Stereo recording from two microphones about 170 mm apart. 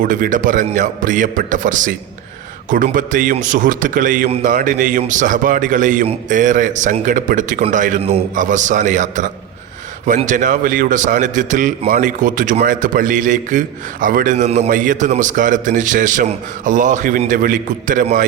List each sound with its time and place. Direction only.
0.0 s a man's voice: 50° right (ahead or behind)